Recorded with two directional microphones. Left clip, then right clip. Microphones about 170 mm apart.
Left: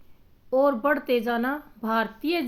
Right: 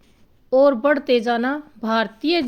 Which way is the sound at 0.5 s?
40° right (ahead or behind).